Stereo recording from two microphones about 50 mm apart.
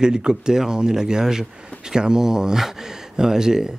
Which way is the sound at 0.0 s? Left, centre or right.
Centre.